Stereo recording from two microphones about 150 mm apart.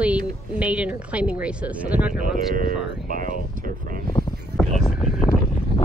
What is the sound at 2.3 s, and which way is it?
Speech, 65° right (ahead or behind).